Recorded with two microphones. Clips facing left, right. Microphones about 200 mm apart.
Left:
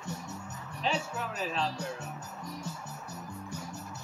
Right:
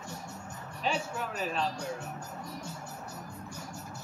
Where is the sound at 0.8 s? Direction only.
Centre (ahead or behind).